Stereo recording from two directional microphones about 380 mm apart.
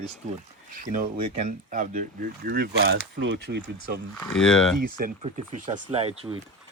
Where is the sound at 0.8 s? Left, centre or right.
Centre.